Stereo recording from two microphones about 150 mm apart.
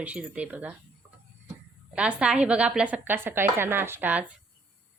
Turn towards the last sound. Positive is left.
turn(degrees=-10)  # may be behind; listen again after turning